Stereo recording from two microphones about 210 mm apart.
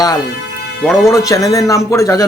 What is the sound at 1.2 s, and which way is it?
Speech, 15° left (ahead or behind).